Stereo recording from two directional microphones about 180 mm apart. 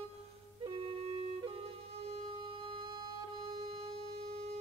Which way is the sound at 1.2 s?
30° right (ahead or behind).